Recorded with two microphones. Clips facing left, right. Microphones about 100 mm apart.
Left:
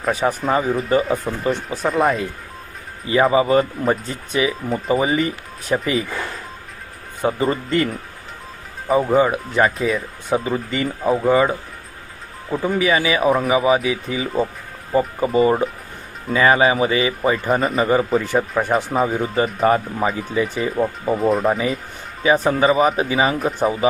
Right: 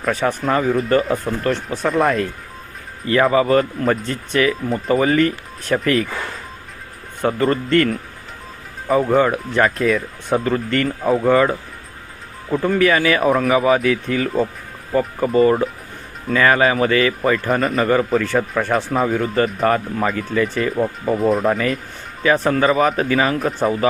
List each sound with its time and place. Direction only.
0.0 s speech: 5° left (ahead or behind)
7.2 s speech: 10° left (ahead or behind)
9.0 s speech: 5° left (ahead or behind)
18.3 s speech: 15° left (ahead or behind)
18.7 s speech: 5° left (ahead or behind)
22.2 s speech: 15° left (ahead or behind)